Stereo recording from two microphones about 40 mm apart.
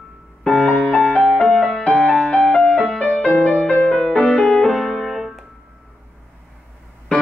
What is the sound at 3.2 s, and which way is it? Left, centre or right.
Music, centre.